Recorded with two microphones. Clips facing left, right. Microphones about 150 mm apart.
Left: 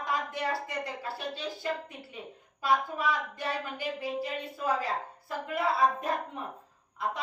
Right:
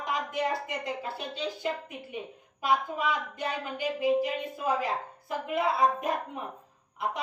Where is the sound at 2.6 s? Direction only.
20° right (ahead or behind).